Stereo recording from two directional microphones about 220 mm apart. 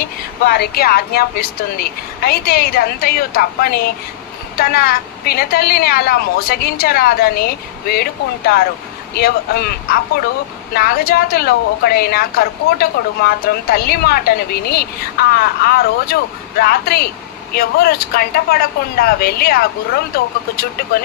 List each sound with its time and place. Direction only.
0.0 s a woman's voice: 45° left (ahead or behind)